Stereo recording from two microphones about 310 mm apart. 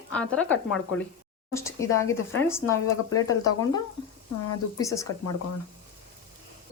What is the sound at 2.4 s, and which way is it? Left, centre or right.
Speech, centre.